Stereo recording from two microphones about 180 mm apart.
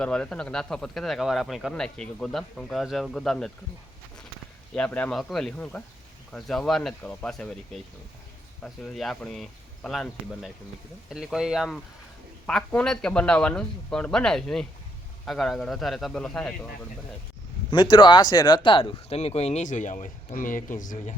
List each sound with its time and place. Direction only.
0.0 s speech: 5° left (ahead or behind)
4.7 s speech: 5° left (ahead or behind)
8.6 s speech: centre (ahead or behind)
17.7 s speech: 25° left (ahead or behind); by 21.2 s 45° left (ahead or behind)